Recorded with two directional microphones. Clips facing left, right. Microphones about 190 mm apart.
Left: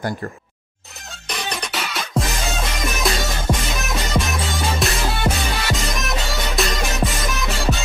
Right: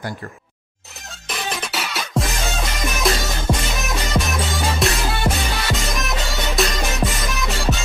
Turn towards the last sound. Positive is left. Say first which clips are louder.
# even
turn(degrees=0)  # may be behind; listen again after turning